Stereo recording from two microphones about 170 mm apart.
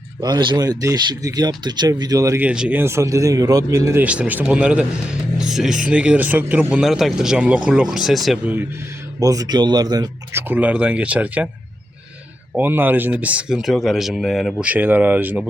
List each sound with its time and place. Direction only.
0.2 s speech: 25° right (ahead or behind)
2.4 s speech: 5° right (ahead or behind)
5.4 s music: 5° right (ahead or behind)
5.9 s speech: 5° right (ahead or behind)
9.2 s speech: 20° right (ahead or behind)
10.5 s speech: 10° right (ahead or behind)
12.5 s speech: 10° right (ahead or behind)